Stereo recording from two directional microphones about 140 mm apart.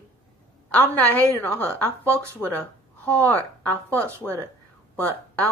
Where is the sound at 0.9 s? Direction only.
15° left (ahead or behind).